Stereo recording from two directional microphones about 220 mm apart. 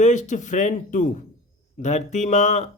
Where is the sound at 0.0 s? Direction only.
35° left (ahead or behind).